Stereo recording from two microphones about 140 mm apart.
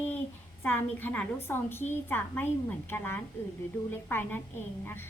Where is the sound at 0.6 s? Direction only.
15° left (ahead or behind).